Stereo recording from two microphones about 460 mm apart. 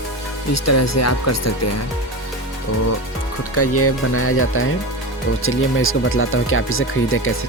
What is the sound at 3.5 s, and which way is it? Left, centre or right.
Speech, left.